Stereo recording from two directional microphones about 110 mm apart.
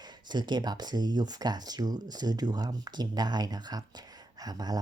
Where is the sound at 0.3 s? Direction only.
40° right (ahead or behind).